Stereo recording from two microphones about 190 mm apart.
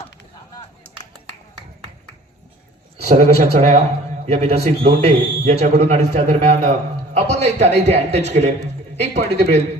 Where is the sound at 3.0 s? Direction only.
35° right (ahead or behind).